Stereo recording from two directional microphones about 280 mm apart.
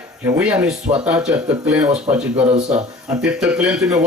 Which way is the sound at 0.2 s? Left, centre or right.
Centre.